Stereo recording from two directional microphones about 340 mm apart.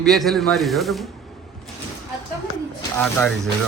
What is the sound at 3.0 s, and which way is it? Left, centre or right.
Speech, centre.